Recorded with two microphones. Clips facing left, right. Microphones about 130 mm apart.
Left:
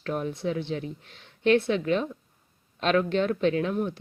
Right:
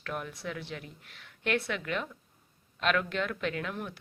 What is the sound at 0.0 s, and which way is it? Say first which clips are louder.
A woman's voice: left 8 dB; 30° left (ahead or behind).